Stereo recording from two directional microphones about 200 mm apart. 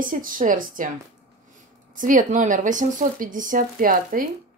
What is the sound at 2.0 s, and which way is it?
Speech, 40° right (ahead or behind).